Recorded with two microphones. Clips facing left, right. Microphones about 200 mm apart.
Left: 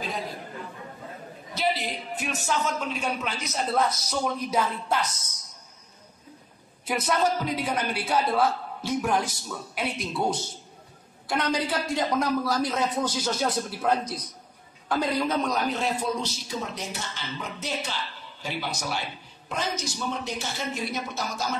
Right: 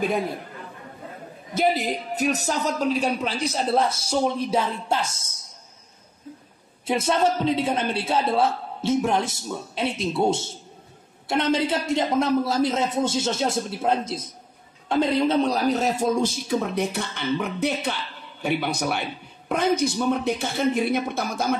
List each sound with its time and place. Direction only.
1.5 s a man's voice: 50° right (ahead or behind); by 5.4 s 25° right (ahead or behind)
6.9 s a man's voice: 25° right (ahead or behind); by 21.5 s 55° right (ahead or behind)